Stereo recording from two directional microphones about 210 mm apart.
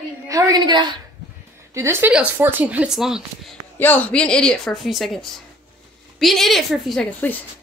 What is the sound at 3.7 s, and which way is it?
A woman's voice, 10° left (ahead or behind).